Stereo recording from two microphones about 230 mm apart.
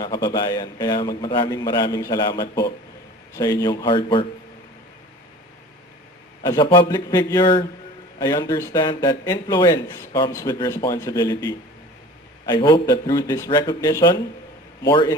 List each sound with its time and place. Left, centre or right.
0.0 s speech: centre
6.4 s speech: centre